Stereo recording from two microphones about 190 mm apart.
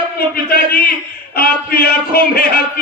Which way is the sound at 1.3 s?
55° left (ahead or behind).